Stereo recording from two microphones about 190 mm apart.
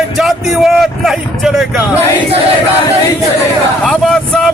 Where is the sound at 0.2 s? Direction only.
Centre (ahead or behind).